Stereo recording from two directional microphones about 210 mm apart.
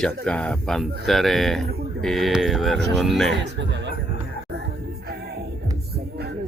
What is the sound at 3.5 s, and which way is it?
Speech, 60° right (ahead or behind).